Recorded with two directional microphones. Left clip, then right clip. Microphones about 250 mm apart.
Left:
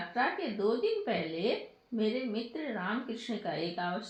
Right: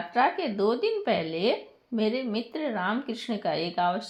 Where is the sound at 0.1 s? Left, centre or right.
Right.